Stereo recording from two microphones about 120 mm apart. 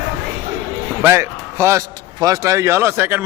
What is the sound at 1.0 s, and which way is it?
A man's voice, 20° right (ahead or behind).